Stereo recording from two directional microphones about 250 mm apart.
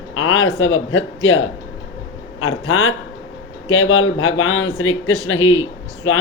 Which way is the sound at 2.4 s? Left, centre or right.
Left.